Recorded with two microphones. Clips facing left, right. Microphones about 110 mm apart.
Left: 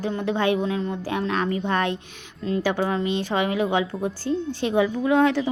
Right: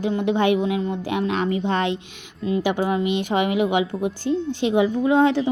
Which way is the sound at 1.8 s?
50° left (ahead or behind).